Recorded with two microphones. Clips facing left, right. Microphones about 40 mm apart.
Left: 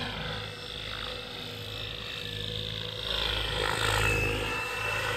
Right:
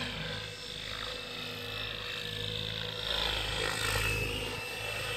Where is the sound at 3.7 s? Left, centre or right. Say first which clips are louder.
Left 5 dB; left.